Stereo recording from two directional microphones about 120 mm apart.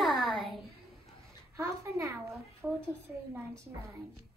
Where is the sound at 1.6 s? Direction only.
25° right (ahead or behind).